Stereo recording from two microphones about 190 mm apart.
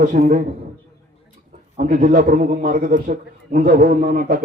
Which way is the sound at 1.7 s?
45° right (ahead or behind).